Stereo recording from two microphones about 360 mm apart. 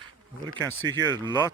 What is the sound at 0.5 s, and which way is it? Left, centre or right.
Speech, centre.